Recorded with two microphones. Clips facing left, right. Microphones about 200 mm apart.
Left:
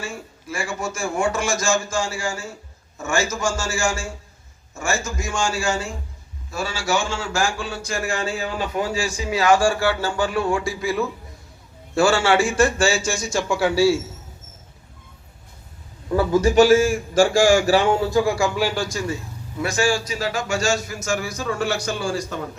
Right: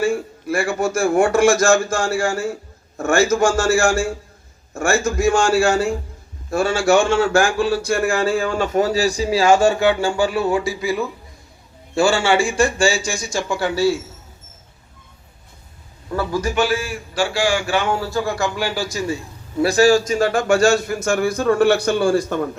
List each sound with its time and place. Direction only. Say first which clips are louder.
0.0 s a man's voice: right 13 dB; 55° right (ahead or behind); by 13.9 s 10° left (ahead or behind)
16.1 s a man's voice: left 4 dB; 20° left (ahead or behind)
16.6 s a man's voice: left 9 dB; 40° left (ahead or behind)
17.9 s speech: left 3 dB; 20° left (ahead or behind)
18.5 s a man's voice: left 1 dB; centre (ahead or behind)
19.5 s a man's voice: right 8 dB; 35° right (ahead or behind); by 22.4 s 55° right (ahead or behind)